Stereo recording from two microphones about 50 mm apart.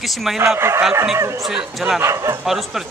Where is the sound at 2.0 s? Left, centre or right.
Right.